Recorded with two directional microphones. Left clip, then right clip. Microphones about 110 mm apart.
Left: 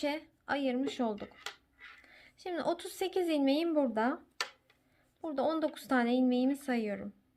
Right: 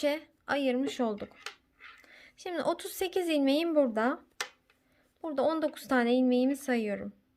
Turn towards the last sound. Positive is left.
turn(degrees=-35)  # may be behind; listen again after turning